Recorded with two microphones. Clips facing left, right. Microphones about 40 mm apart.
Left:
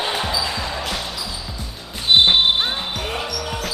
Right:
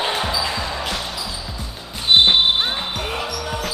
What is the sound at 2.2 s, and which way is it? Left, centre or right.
Basketball bounce, centre.